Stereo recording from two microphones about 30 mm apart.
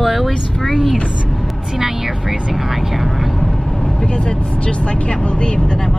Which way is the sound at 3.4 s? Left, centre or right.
Centre.